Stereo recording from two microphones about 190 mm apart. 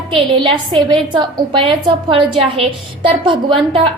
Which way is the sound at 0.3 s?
25° right (ahead or behind).